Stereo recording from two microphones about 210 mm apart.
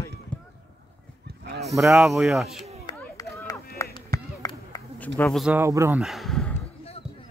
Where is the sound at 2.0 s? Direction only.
Centre (ahead or behind).